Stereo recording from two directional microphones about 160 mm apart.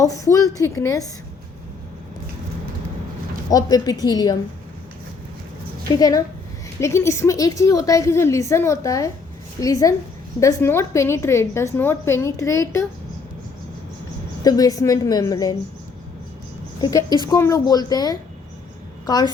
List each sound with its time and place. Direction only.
0.0 s a woman's voice: 20° left (ahead or behind)
3.5 s a woman's voice: 20° left (ahead or behind)
5.9 s a woman's voice: 20° left (ahead or behind)
14.4 s a woman's voice: 25° left (ahead or behind)
16.8 s a woman's voice: 25° left (ahead or behind)